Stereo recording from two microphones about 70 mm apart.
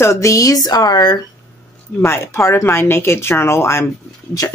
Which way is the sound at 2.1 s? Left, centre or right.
Left.